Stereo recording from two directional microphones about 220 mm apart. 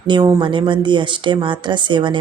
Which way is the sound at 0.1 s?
20° right (ahead or behind).